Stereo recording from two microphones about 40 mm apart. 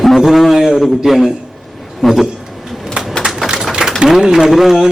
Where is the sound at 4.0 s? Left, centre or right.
Centre.